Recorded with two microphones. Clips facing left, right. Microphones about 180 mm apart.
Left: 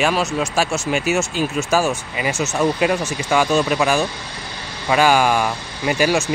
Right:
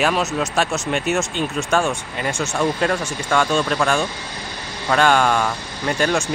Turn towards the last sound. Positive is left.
turn(degrees=5)  # may be behind; listen again after turning